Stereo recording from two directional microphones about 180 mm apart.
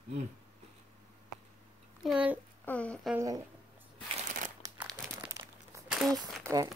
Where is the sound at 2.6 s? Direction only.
5° left (ahead or behind).